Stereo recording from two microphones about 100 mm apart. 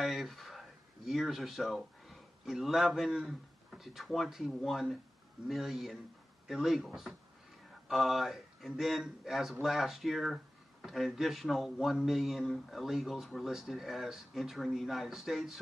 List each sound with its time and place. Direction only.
0.0 s a man's voice: centre (ahead or behind)